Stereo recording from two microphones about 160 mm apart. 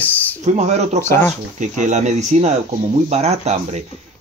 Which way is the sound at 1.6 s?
50° right (ahead or behind).